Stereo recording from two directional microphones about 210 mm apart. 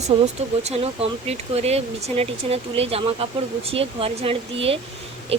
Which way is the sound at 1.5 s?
30° right (ahead or behind).